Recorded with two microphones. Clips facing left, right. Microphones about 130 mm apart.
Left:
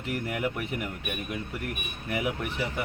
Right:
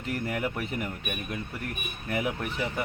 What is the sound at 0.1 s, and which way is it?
Speech, 10° left (ahead or behind).